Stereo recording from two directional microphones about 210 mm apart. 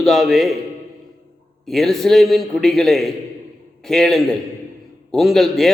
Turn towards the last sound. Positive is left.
turn(degrees=0)  # may be behind; listen again after turning